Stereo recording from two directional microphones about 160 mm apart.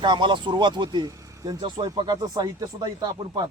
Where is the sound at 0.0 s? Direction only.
30° right (ahead or behind).